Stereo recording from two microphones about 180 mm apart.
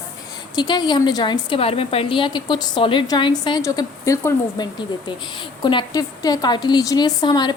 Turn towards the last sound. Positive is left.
turn(degrees=25)  # may be behind; listen again after turning